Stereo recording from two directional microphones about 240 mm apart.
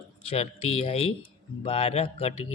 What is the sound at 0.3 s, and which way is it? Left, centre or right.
Speech, left.